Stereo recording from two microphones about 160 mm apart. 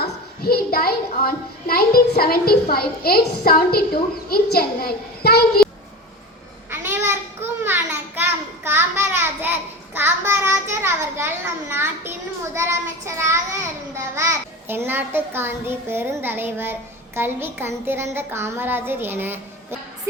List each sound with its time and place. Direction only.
0.0 s a child's voice: 75° left (ahead or behind)
6.7 s a sound: 15° right (ahead or behind)
12.5 s child singing: 15° right (ahead or behind)
17.2 s a child's voice: 15° right (ahead or behind)